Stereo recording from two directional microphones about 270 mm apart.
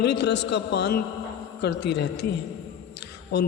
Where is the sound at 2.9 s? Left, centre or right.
Left.